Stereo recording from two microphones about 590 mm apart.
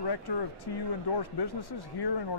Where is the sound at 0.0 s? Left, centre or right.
Left.